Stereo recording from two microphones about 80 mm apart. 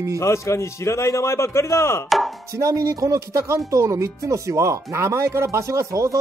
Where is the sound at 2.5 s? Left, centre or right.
Right.